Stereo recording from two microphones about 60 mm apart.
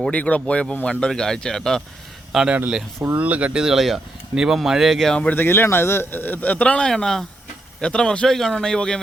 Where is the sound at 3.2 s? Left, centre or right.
Right.